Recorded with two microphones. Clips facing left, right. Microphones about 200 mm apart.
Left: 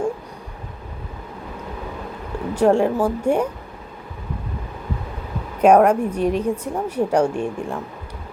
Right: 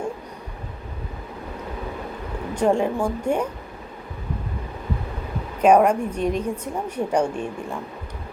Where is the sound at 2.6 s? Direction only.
10° left (ahead or behind).